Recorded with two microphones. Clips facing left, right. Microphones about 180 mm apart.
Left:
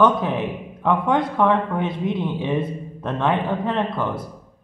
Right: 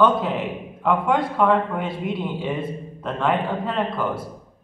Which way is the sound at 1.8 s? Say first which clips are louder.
Left 3 dB; 20° left (ahead or behind).